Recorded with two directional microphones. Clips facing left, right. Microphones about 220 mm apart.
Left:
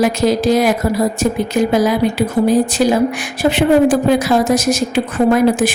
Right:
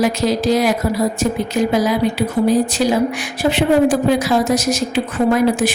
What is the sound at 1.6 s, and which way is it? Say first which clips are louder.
Speech: left 2 dB; 50° left (ahead or behind).